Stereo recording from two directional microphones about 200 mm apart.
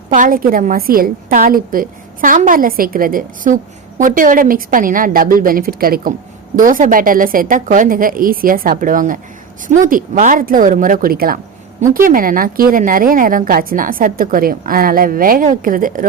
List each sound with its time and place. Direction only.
0.1 s a woman's voice: 40° right (ahead or behind)